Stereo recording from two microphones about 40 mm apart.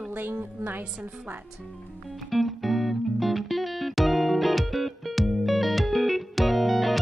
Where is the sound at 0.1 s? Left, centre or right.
Right.